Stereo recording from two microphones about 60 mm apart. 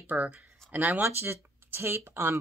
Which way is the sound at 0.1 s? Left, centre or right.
Right.